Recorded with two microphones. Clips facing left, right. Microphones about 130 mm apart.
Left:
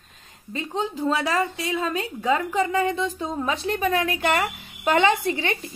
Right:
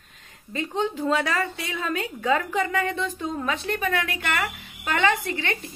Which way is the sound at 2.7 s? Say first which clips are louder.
Left 3 dB; 25° left (ahead or behind).